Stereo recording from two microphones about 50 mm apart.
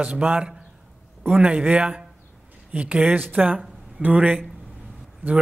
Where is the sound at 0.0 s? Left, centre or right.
Right.